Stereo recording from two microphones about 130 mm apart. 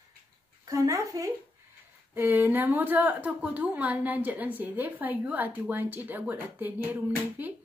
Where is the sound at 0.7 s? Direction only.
25° right (ahead or behind).